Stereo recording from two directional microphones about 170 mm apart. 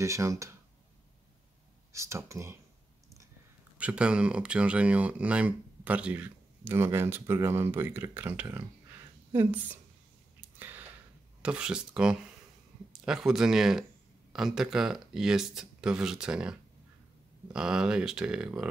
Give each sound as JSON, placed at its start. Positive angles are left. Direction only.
{"t": 0.0, "sound": "speech", "side_deg": -15}
{"t": 1.9, "sound": "speech", "side_deg": -15}
{"t": 3.7, "sound": "speech", "side_deg": -5}
{"t": 10.6, "sound": "a sound", "side_deg": -10}
{"t": 11.4, "sound": "speech", "side_deg": -5}